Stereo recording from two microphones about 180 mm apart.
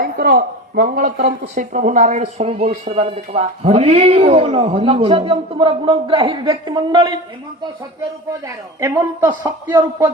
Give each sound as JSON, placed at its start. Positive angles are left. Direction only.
{"t": 0.0, "sound": "a man's voice", "side_deg": -60}
{"t": 8.3, "sound": "a woman's voice", "side_deg": -15}